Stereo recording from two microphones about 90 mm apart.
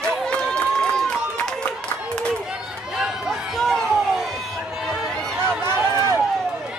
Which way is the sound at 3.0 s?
Centre (ahead or behind).